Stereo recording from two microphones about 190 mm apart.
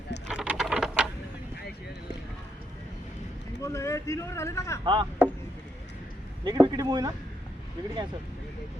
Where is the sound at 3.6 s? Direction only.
15° left (ahead or behind).